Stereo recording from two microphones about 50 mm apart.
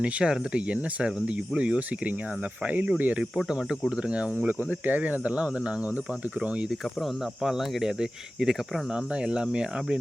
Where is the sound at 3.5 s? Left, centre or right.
Centre.